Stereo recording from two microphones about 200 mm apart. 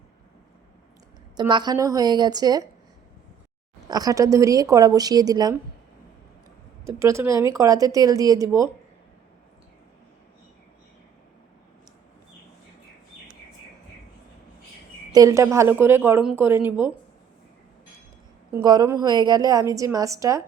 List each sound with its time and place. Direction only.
1.4 s a woman's voice: 20° right (ahead or behind)
3.8 s a woman's voice: 20° right (ahead or behind)
6.8 s speech: 15° right (ahead or behind)
15.1 s speech: 15° right (ahead or behind)
18.5 s speech: 20° right (ahead or behind)